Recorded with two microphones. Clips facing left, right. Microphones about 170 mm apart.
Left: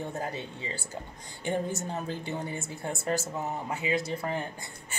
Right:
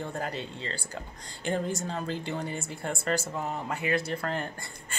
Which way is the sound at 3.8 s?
65° right (ahead or behind).